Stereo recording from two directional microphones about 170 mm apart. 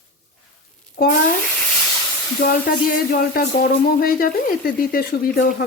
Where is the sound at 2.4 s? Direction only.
65° left (ahead or behind).